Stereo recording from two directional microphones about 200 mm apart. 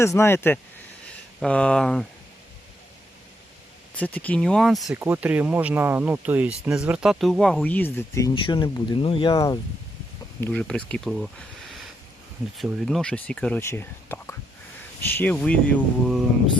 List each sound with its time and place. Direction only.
0.0 s speech: 15° left (ahead or behind)
3.9 s speech: 5° left (ahead or behind)
8.3 s speech: 25° left (ahead or behind)
10.4 s speech: 5° left (ahead or behind)
12.5 s speech: centre (ahead or behind)